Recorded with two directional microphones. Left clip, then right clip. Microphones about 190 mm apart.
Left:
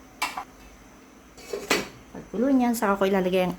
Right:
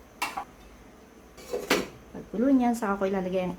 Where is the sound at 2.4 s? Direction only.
15° left (ahead or behind); by 3.5 s 35° left (ahead or behind).